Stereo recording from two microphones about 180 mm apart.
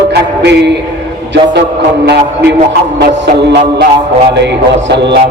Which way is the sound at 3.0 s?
70° right (ahead or behind).